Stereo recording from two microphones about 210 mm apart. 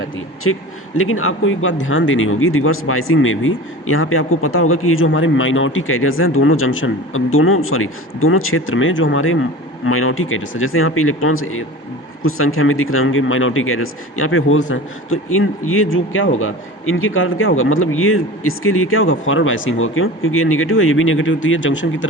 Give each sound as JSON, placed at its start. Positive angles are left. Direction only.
{"t": 0.4, "sound": "speech", "side_deg": 90}
{"t": 0.9, "sound": "speech", "side_deg": 80}
{"t": 9.8, "sound": "speech", "side_deg": 85}
{"t": 14.7, "sound": "speech", "side_deg": 80}